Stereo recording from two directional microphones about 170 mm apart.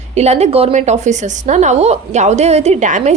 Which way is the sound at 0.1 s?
40° right (ahead or behind).